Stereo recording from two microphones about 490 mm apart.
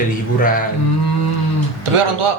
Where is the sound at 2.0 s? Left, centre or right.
Right.